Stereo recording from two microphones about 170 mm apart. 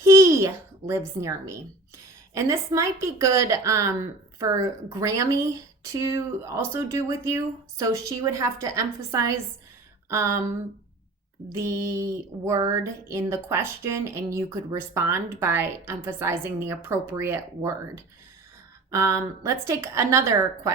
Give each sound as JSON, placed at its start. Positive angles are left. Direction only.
{"t": 0.0, "sound": "a child's voice", "side_deg": -15}
{"t": 11.5, "sound": "speech", "side_deg": -15}